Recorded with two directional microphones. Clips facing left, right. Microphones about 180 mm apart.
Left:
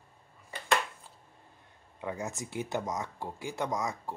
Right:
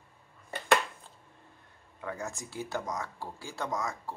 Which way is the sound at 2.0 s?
20° left (ahead or behind).